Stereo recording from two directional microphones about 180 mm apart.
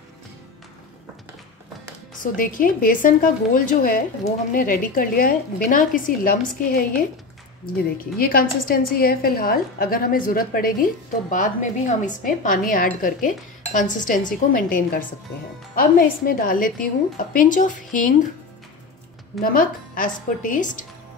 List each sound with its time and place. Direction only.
2.3 s a woman's voice: 50° left (ahead or behind)
19.4 s a woman's voice: 50° left (ahead or behind)